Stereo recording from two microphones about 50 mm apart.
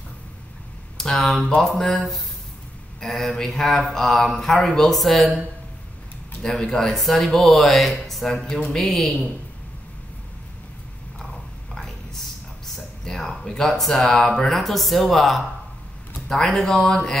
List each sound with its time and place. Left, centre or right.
0.9 s speech: centre
6.4 s speech: centre
11.7 s a sound: centre
12.7 s speech: centre